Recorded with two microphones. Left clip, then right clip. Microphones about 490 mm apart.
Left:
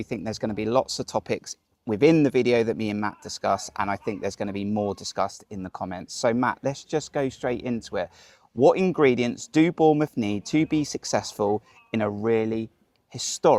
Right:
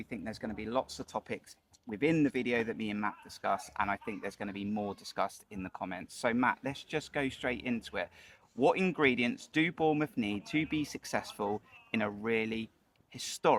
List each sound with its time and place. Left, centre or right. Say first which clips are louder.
0.0 s speech: left 11 dB; left